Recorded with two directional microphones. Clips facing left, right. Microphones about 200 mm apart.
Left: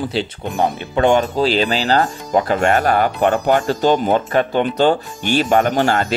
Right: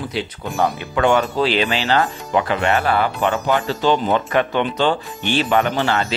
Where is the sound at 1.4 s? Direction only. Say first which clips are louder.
Left 2 dB; 40° left (ahead or behind).